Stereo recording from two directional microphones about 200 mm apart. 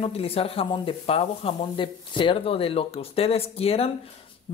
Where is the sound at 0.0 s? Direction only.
30° left (ahead or behind).